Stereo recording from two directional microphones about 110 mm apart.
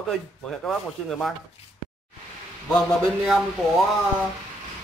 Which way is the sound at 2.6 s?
5° left (ahead or behind).